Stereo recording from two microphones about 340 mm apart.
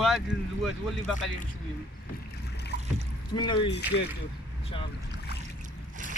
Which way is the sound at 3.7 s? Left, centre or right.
Left.